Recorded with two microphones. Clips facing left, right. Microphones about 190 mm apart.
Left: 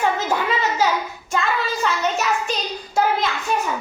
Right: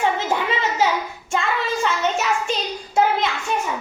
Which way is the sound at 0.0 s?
25° right (ahead or behind).